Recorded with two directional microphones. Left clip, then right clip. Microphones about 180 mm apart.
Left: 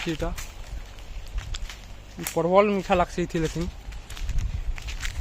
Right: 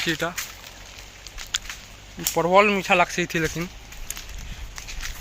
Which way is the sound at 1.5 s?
5° left (ahead or behind).